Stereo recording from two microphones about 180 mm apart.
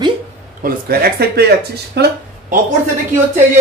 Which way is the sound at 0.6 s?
60° right (ahead or behind).